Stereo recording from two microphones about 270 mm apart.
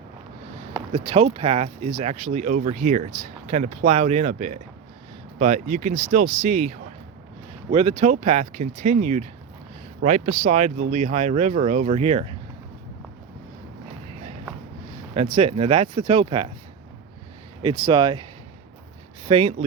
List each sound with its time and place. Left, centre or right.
0.9 s speech: right
15.1 s speech: right
17.6 s speech: centre